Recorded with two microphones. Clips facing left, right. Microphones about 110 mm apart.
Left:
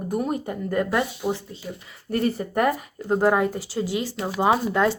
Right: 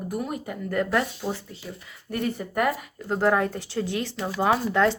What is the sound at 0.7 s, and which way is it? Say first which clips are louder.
Speech: left 1 dB; 15° left (ahead or behind).